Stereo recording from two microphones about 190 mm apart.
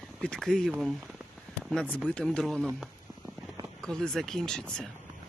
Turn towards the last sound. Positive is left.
turn(degrees=5)  # may be behind; listen again after turning